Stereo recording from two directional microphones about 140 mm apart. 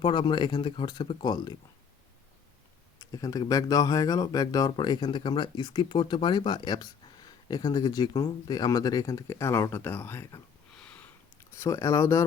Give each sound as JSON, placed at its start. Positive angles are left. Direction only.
{"t": 0.0, "sound": "speech", "side_deg": 35}
{"t": 3.0, "sound": "speech", "side_deg": 25}
{"t": 10.8, "sound": "sniff", "side_deg": 10}
{"t": 11.5, "sound": "speech", "side_deg": 20}